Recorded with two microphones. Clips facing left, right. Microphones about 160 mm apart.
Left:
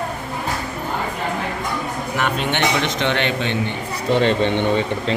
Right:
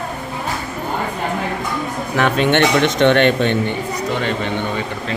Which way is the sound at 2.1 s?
60° right (ahead or behind).